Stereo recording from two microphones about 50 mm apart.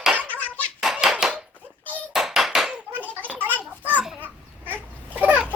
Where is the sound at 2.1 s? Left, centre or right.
Centre.